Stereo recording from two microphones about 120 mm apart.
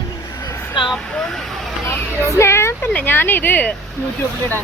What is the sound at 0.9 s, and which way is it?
Speech, 5° left (ahead or behind).